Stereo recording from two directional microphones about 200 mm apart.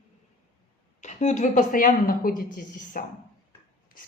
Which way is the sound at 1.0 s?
35° left (ahead or behind).